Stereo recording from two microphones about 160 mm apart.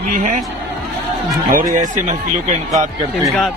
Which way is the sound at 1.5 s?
55° right (ahead or behind).